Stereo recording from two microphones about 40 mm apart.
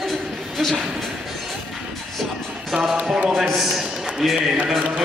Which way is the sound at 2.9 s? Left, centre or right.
Right.